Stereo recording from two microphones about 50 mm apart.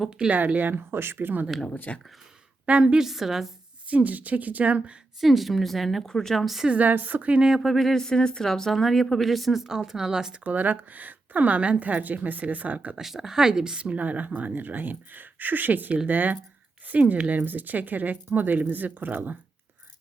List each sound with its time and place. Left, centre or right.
0.3 s speech: right
1.9 s speech: left
2.6 s speech: right
3.1 s speech: centre
3.8 s speech: right
5.2 s speech: centre
6.4 s speech: centre
6.7 s speech: right
7.6 s speech: centre
10.4 s speech: right
13.0 s speech: centre; by 19.4 s right